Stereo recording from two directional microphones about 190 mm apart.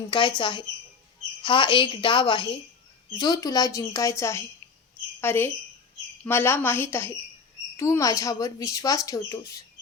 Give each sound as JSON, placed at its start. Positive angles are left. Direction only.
{"t": 0.1, "sound": "a woman's voice", "side_deg": 25}